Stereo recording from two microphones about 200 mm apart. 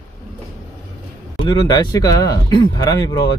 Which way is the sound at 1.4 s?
20° left (ahead or behind).